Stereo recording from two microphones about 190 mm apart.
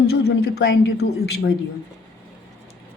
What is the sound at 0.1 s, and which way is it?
Speech, 55° left (ahead or behind).